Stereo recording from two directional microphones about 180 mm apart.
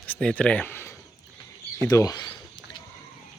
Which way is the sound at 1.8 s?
20° left (ahead or behind).